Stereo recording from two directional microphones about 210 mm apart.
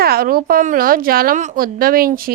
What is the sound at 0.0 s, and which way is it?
A woman's voice, 45° right (ahead or behind).